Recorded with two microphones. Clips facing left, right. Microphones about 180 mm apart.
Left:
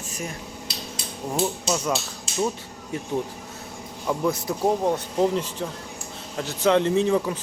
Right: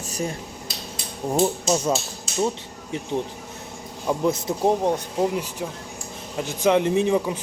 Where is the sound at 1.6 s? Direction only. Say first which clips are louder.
Right 3 dB; 25° right (ahead or behind).